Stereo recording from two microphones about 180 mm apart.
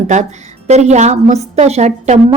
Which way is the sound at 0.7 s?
40° right (ahead or behind).